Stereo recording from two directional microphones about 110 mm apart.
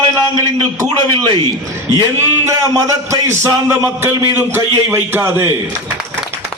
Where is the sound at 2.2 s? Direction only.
25° right (ahead or behind).